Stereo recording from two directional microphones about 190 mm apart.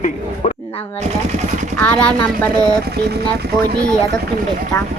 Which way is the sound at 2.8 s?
55° right (ahead or behind).